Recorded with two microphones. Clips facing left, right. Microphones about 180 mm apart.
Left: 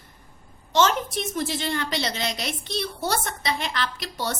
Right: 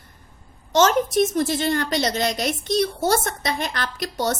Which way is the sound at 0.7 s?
45° right (ahead or behind).